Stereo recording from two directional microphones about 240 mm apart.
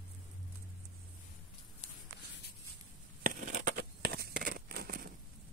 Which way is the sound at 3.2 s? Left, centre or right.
Right.